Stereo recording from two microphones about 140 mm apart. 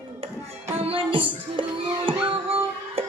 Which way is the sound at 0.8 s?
40° right (ahead or behind).